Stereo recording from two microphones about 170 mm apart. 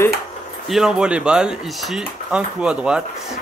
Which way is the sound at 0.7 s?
5° right (ahead or behind).